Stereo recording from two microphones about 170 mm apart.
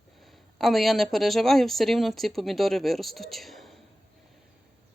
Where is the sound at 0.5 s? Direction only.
Centre (ahead or behind).